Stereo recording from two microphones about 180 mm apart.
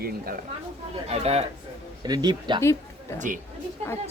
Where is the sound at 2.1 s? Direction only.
20° right (ahead or behind).